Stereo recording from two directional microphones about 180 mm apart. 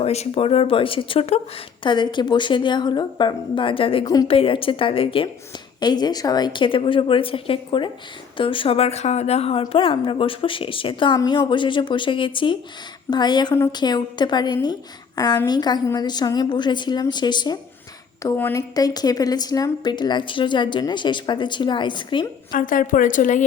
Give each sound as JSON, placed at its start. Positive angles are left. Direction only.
{"t": 0.0, "sound": "a woman's voice", "side_deg": 35}
{"t": 22.5, "sound": "a woman's voice", "side_deg": 50}